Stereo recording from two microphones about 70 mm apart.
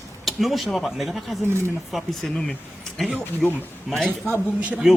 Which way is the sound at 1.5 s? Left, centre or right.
Right.